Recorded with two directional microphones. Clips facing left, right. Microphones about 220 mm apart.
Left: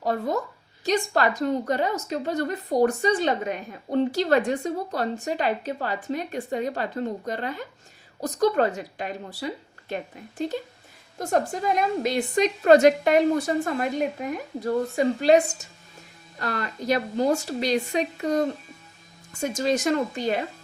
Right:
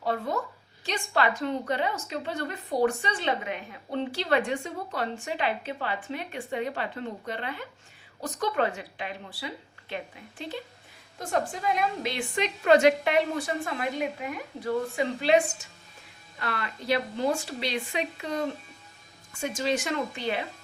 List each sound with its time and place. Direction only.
0.0 s a woman's voice: 40° left (ahead or behind)